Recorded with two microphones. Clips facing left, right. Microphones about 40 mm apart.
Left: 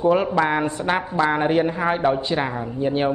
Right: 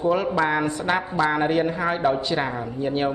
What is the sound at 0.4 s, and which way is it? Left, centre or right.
A woman's voice, centre.